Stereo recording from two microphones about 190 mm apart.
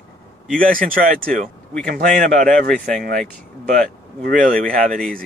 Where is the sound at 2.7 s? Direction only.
5° left (ahead or behind).